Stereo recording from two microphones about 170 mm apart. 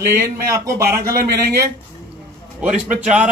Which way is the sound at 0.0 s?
15° right (ahead or behind).